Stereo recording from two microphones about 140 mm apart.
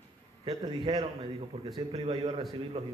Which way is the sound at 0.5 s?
30° right (ahead or behind).